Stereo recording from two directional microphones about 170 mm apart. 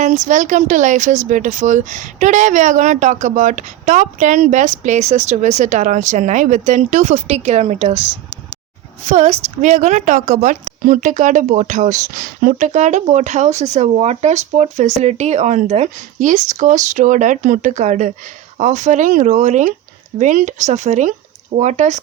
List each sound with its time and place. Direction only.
0.0 s a woman's voice: 45° right (ahead or behind)
9.0 s a woman's voice: 40° right (ahead or behind)